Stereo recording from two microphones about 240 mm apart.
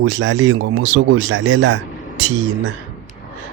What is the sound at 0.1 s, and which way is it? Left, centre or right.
Speech, right.